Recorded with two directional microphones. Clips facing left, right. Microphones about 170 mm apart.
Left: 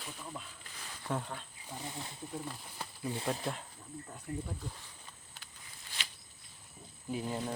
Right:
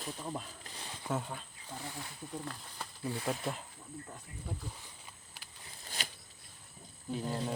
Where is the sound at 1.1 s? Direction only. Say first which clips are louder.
Right 1 dB; 5° right (ahead or behind).